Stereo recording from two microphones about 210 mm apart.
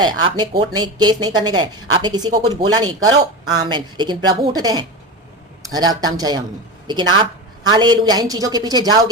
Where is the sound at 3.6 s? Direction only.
20° right (ahead or behind).